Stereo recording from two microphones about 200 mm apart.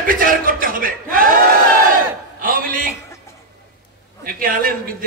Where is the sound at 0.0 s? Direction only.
45° right (ahead or behind).